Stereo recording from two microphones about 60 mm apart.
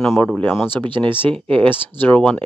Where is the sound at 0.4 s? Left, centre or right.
Left.